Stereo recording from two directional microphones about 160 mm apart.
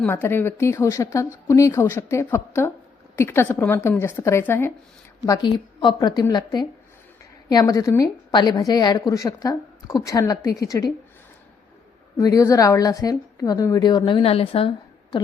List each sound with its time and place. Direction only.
0.1 s a woman's voice: 15° left (ahead or behind)
12.1 s a woman's voice: 20° left (ahead or behind); by 14.7 s 35° left (ahead or behind)